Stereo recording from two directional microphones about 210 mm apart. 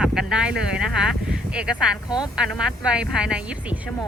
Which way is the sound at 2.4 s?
5° right (ahead or behind).